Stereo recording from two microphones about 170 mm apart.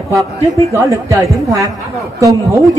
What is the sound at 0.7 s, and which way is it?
A man's voice, 20° right (ahead or behind).